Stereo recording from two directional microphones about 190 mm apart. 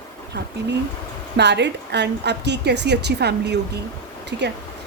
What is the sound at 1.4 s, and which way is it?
A woman's voice, 65° right (ahead or behind).